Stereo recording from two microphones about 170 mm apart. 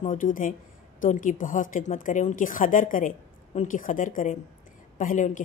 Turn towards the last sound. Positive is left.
turn(degrees=50)  # may be behind; listen again after turning